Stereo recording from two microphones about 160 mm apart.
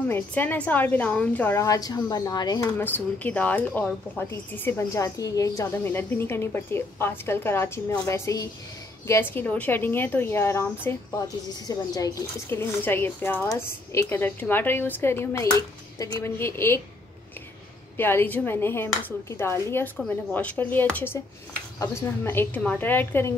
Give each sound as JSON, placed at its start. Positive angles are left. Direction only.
{"t": 0.1, "sound": "speech", "side_deg": 10}
{"t": 2.8, "sound": "a woman's voice", "side_deg": 10}
{"t": 17.9, "sound": "speech", "side_deg": 15}